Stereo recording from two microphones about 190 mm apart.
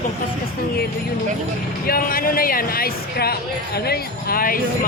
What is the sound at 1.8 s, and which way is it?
Speech, 50° left (ahead or behind).